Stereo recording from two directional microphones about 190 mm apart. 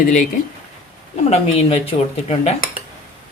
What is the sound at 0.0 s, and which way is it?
Speech, 45° left (ahead or behind).